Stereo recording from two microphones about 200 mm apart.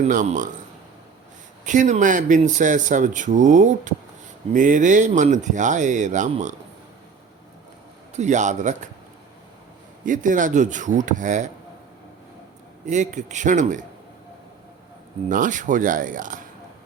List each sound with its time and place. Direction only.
0.0 s speech: 35° right (ahead or behind)
1.6 s speech: 40° right (ahead or behind)
8.1 s speech: 35° right (ahead or behind)
10.1 s speech: 40° right (ahead or behind)
12.8 s speech: 35° right (ahead or behind)
15.3 s speech: 40° right (ahead or behind)